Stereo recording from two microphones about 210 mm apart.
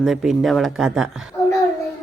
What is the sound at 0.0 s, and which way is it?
Speech, centre (ahead or behind).